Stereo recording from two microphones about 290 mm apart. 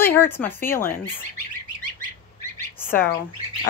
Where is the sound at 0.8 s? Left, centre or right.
Left.